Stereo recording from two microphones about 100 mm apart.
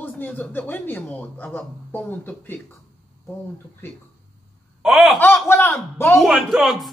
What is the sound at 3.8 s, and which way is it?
Speech, 20° left (ahead or behind).